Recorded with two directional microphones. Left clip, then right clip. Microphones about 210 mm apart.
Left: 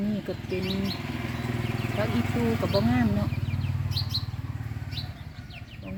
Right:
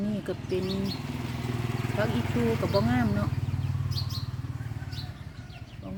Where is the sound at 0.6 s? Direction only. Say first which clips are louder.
Left 1 dB; 20° left (ahead or behind).